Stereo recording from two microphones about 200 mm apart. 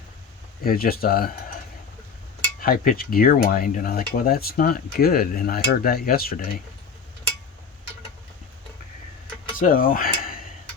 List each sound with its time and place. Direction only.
0.6 s speech: 50° left (ahead or behind)
2.6 s speech: 45° left (ahead or behind)
9.6 s speech: 45° left (ahead or behind)